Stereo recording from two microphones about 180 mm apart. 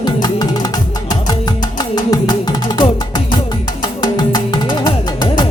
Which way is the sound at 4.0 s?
20° left (ahead or behind).